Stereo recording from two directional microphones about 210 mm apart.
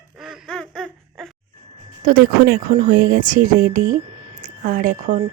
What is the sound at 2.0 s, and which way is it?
Speech, 45° right (ahead or behind).